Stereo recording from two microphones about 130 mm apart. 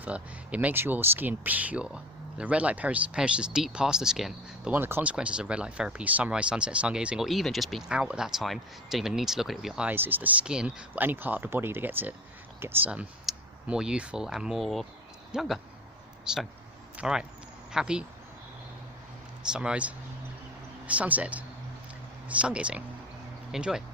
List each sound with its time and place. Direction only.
0.0 s speech: 10° right (ahead or behind)
4.7 s speech: 15° right (ahead or behind)
19.5 s speech: 5° right (ahead or behind)